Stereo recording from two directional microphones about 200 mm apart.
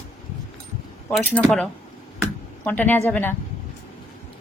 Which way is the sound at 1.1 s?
5° left (ahead or behind).